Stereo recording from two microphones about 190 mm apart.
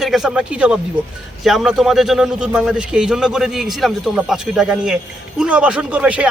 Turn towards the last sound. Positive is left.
turn(degrees=-5)  # may be behind; listen again after turning